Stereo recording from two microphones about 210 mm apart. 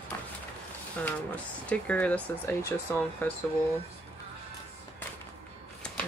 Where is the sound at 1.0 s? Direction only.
5° left (ahead or behind).